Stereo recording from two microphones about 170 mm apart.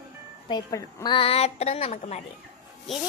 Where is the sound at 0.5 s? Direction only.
20° left (ahead or behind); by 2.2 s 40° left (ahead or behind).